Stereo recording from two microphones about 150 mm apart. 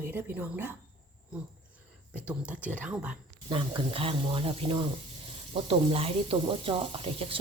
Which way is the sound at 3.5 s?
35° right (ahead or behind).